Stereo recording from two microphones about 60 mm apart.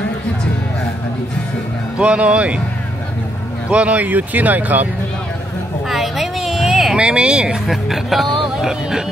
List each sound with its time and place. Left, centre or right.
2.0 s speech: right
3.7 s speech: right
5.9 s a sound: centre
7.0 s speech: centre
7.6 s speech: centre